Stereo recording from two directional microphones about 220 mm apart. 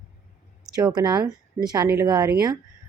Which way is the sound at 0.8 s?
20° right (ahead or behind).